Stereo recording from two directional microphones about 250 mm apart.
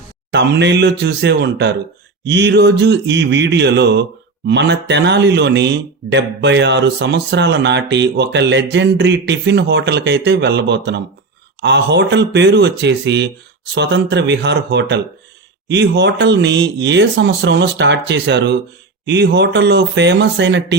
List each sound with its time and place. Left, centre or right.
0.3 s speech: right